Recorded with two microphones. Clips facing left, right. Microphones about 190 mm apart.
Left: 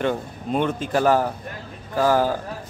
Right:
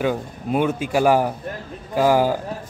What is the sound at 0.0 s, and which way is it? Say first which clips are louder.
Speech: right 1 dB; 5° right (ahead or behind).